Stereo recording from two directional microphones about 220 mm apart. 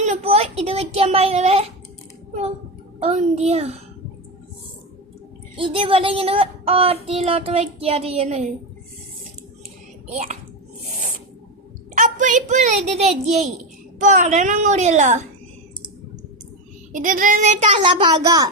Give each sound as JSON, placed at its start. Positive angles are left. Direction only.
{"t": 0.0, "sound": "child singing", "side_deg": -30}
{"t": 3.0, "sound": "a sound", "side_deg": -30}
{"t": 5.5, "sound": "a sound", "side_deg": -25}
{"t": 10.1, "sound": "speech", "side_deg": -30}
{"t": 11.9, "sound": "a child's voice", "side_deg": -35}
{"t": 16.9, "sound": "a child's voice", "side_deg": -35}
{"t": 17.8, "sound": "a woman's voice", "side_deg": -20}